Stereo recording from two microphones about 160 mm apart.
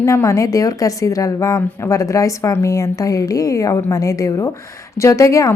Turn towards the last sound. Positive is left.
turn(degrees=20)  # may be behind; listen again after turning